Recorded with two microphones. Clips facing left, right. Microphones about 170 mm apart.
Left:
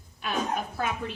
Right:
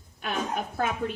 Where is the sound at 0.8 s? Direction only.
55° right (ahead or behind).